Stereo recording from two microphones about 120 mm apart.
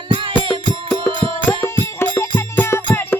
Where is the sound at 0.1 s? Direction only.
45° right (ahead or behind).